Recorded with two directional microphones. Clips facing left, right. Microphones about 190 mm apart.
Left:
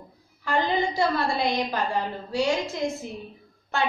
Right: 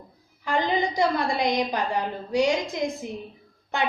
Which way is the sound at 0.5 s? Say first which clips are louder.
Even; 15° right (ahead or behind).